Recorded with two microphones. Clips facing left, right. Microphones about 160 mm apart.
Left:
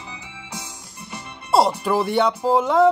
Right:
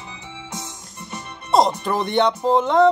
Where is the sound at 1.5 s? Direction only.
5° left (ahead or behind).